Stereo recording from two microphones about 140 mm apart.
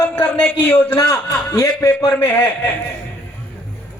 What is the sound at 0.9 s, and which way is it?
Speech, 30° left (ahead or behind).